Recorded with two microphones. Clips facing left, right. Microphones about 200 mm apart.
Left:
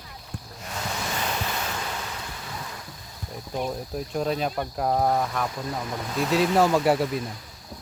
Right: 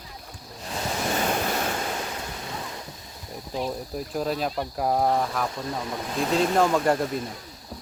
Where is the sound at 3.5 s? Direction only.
Centre (ahead or behind).